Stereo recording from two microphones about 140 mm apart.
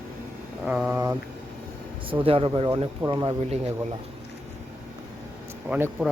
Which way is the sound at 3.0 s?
25° right (ahead or behind).